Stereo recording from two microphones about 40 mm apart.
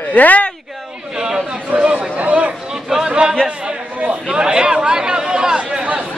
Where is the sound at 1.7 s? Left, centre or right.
Right.